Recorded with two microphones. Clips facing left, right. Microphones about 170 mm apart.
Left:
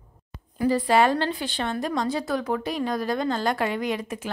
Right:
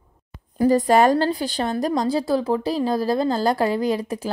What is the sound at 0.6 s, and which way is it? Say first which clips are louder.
A woman's voice: right 4 dB; 45° right (ahead or behind).